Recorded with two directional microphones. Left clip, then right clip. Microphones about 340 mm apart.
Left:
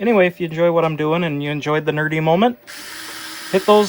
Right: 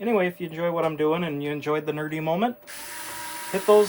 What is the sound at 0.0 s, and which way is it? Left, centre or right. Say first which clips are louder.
Speech: left 9 dB; left.